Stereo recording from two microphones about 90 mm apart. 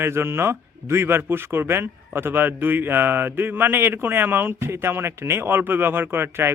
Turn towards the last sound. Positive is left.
turn(degrees=-25)  # may be behind; listen again after turning